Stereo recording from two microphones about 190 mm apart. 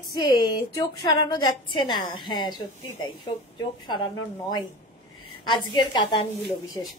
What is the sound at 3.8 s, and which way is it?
A woman's voice, 25° left (ahead or behind).